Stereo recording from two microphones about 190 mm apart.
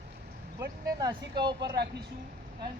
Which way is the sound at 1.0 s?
20° right (ahead or behind).